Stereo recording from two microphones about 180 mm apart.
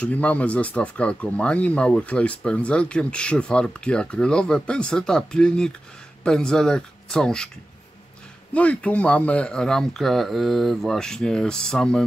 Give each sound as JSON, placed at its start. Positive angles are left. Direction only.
{"t": 0.0, "sound": "speech", "side_deg": 10}
{"t": 8.5, "sound": "speech", "side_deg": 5}